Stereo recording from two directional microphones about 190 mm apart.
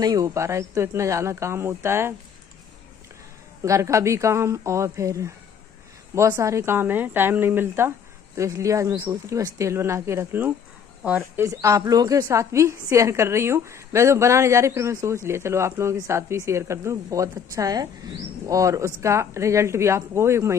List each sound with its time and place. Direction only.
0.0 s speech: 20° right (ahead or behind)
3.6 s speech: 15° right (ahead or behind)